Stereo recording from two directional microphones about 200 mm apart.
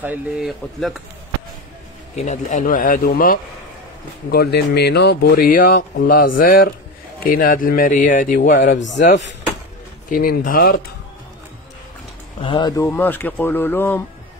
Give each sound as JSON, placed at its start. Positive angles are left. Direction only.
{"t": 0.0, "sound": "speech", "side_deg": -5}
{"t": 2.1, "sound": "speech", "side_deg": 35}
{"t": 10.0, "sound": "speech", "side_deg": 45}
{"t": 12.4, "sound": "speech", "side_deg": 25}